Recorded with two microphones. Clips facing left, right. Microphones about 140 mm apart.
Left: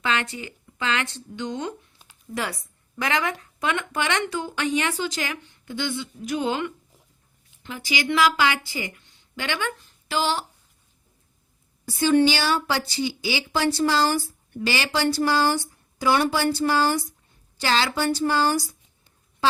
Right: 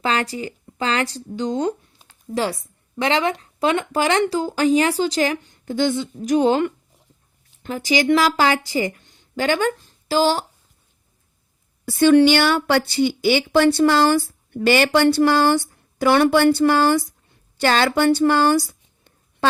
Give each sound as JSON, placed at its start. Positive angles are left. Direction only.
{"t": 0.0, "sound": "speech", "side_deg": -35}
{"t": 11.9, "sound": "speech", "side_deg": -65}